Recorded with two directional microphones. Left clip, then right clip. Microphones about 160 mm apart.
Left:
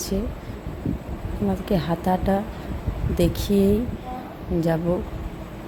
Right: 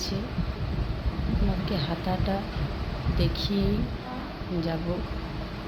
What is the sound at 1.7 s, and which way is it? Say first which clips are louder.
Speech: left 8 dB; 45° left (ahead or behind).